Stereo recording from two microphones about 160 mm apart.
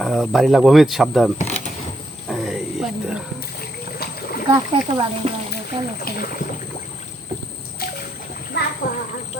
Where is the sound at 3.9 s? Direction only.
75° left (ahead or behind).